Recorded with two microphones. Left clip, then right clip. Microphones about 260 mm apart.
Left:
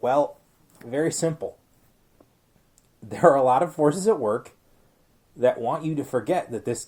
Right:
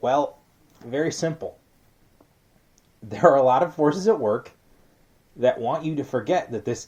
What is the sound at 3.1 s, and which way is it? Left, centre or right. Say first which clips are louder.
Speech: right 1 dB; left.